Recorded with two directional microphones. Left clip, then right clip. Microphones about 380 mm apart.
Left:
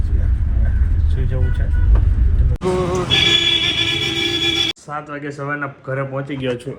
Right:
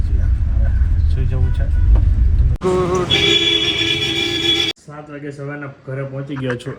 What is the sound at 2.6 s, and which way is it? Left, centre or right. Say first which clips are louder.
Music: right 2 dB; right.